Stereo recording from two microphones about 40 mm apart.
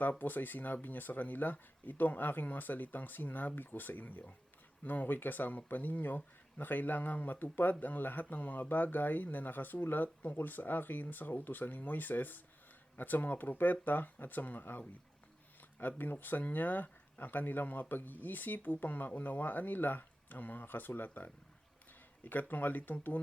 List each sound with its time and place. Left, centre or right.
0.2 s speech: left
15.8 s speech: left